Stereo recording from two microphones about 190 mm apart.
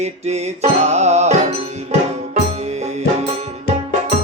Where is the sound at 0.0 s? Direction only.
35° right (ahead or behind).